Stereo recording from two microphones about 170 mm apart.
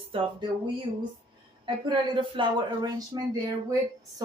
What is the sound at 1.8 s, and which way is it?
Speech, 30° right (ahead or behind).